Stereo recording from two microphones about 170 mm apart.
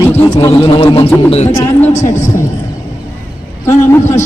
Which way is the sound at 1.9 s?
45° left (ahead or behind).